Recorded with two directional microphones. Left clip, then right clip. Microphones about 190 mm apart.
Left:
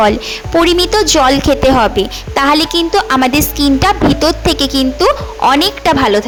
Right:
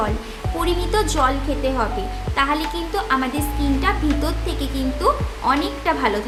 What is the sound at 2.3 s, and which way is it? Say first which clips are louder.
A woman's voice: left 10 dB; 50° left (ahead or behind).